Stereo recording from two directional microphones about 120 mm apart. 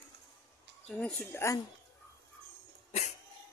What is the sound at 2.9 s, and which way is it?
Cat, 70° left (ahead or behind).